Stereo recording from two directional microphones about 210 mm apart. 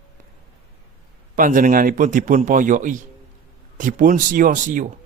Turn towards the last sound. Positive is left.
turn(degrees=-40)  # may be behind; listen again after turning